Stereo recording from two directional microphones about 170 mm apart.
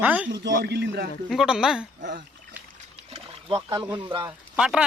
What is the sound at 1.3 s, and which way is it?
Speech, 5° right (ahead or behind).